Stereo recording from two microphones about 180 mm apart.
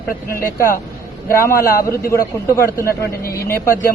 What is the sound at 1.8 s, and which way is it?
Speech, 15° left (ahead or behind).